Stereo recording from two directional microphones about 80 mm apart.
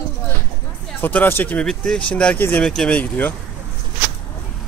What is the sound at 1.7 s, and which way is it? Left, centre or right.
Speech, centre.